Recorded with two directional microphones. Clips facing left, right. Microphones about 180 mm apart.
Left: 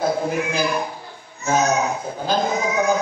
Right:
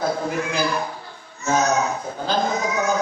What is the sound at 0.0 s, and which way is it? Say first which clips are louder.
A man's voice: left 2 dB; 15° left (ahead or behind).